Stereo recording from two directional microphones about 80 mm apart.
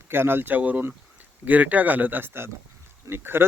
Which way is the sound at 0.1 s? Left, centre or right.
Right.